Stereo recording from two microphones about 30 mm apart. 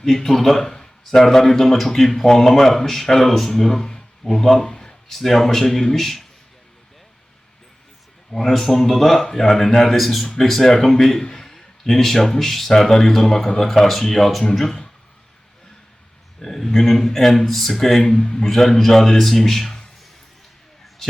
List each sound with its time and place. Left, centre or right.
0.0 s a man's voice: centre
8.3 s a man's voice: centre
11.3 s a sound: centre
12.3 s a man's voice: centre
16.4 s a man's voice: centre